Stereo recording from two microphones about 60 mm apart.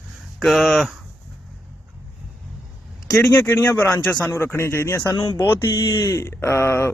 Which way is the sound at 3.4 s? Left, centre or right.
Left.